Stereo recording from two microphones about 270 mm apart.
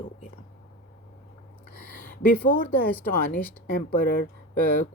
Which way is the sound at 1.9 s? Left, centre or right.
Left.